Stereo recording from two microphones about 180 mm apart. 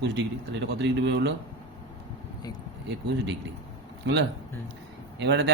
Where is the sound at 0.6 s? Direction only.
80° right.